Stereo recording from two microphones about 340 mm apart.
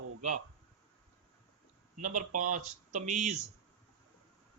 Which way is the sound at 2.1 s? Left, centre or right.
Right.